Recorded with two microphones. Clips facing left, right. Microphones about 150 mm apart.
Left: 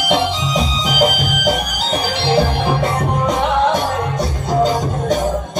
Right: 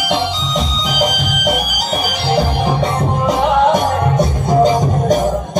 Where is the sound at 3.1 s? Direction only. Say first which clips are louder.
Right 2 dB; 5° right (ahead or behind).